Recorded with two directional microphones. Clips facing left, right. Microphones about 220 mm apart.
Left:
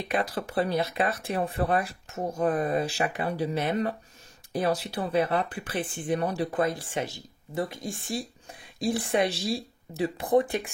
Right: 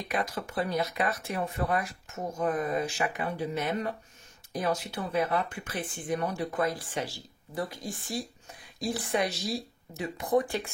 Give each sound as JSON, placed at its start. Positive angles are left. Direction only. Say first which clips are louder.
{"t": 0.1, "sound": "speech", "louder": "left 4 dB", "side_deg": 35}